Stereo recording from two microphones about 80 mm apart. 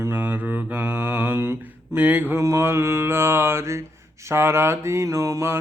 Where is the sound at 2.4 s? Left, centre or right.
Right.